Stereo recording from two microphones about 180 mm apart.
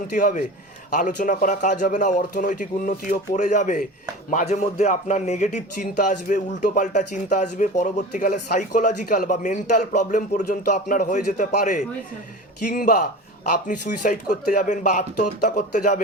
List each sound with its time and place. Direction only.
0.1 s speech: 45° left (ahead or behind)